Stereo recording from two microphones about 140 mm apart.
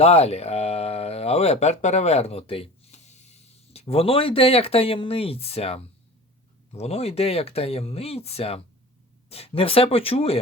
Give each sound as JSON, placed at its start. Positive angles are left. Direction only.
{"t": 0.0, "sound": "speech", "side_deg": 50}